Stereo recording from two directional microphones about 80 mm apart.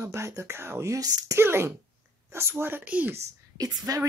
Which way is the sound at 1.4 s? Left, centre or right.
Right.